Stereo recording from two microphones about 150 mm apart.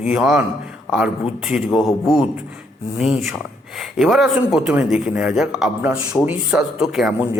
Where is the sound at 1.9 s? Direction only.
20° left (ahead or behind).